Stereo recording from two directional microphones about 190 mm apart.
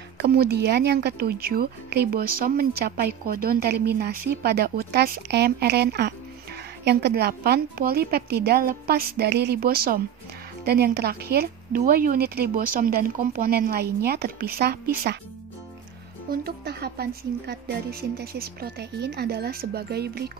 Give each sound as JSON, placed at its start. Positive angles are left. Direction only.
{"t": 0.2, "sound": "a woman's voice", "side_deg": -55}
{"t": 16.3, "sound": "speech", "side_deg": -55}